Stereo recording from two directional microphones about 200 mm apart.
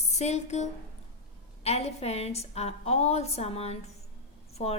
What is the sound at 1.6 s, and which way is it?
A woman's voice, 30° left (ahead or behind).